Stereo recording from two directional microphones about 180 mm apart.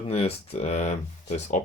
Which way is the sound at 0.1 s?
35° left (ahead or behind).